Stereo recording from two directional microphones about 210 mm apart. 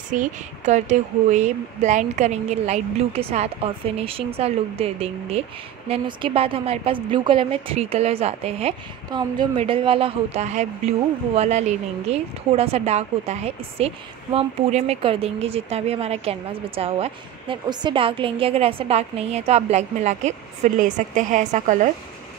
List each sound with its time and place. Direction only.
0.1 s a woman's voice: 35° right (ahead or behind)